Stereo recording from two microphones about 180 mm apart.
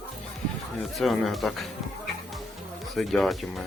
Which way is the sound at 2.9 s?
Centre (ahead or behind).